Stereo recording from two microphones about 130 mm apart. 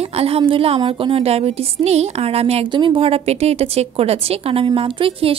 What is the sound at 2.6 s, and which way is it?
A woman's voice, 40° right (ahead or behind).